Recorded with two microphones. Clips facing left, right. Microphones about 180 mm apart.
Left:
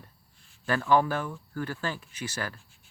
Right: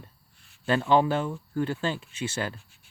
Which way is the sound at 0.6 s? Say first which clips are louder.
Right 2 dB; 20° right (ahead or behind).